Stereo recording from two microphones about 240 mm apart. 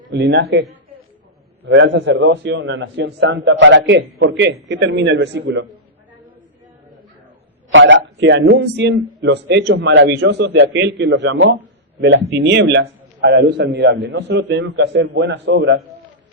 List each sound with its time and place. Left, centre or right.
0.1 s a man's voice: right
1.6 s a man's voice: right
7.7 s a man's voice: right